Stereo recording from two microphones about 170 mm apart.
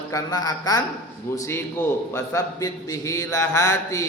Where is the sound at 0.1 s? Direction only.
20° left (ahead or behind).